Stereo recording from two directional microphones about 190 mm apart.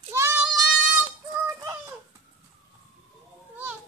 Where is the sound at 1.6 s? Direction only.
15° right (ahead or behind).